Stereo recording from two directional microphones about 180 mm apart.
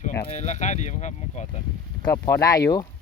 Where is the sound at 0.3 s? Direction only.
40° left (ahead or behind).